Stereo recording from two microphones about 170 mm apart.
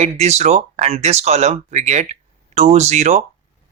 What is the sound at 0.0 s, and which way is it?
Speech, 40° right (ahead or behind).